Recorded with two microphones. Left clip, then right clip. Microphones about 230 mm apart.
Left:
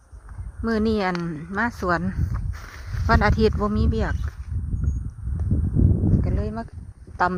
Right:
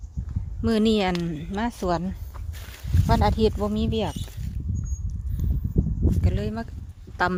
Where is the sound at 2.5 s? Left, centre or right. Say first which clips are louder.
Right 2 dB; centre.